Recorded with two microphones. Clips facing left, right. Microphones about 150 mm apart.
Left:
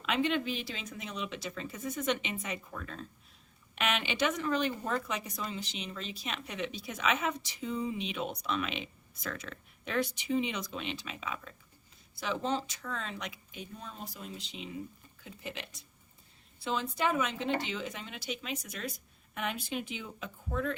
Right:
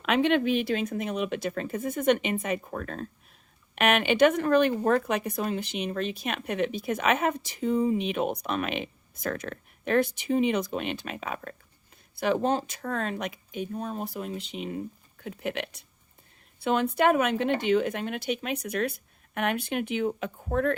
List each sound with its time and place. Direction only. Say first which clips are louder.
0.0 s a woman's voice: right 7 dB; 60° right (ahead or behind)